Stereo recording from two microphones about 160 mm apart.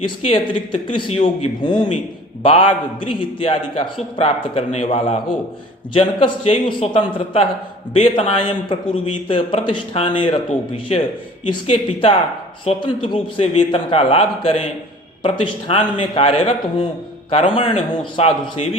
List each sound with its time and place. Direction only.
0.0 s a man's voice: 35° left (ahead or behind)